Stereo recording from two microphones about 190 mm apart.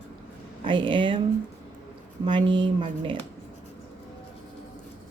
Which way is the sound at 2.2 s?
25° right (ahead or behind).